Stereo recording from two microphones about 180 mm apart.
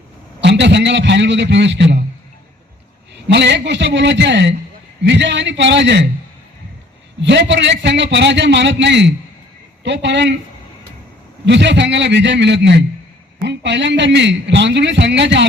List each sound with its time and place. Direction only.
0.4 s a man's voice: 75° right (ahead or behind)
3.2 s a man's voice: 75° right (ahead or behind)
7.2 s a man's voice: 80° right
11.4 s a man's voice: 75° right (ahead or behind)